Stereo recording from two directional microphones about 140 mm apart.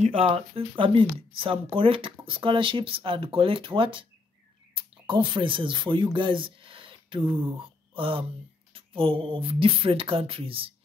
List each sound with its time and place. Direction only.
0.0 s speech: 45° right (ahead or behind)
7.5 s a sound: 40° right (ahead or behind)
8.7 s speech: 40° right (ahead or behind)